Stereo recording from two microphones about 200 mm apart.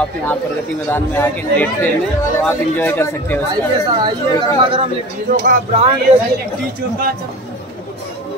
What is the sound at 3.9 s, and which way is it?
Speech, 20° right (ahead or behind).